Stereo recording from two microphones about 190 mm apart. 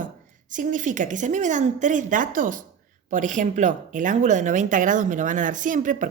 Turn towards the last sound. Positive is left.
turn(degrees=-45)  # may be behind; listen again after turning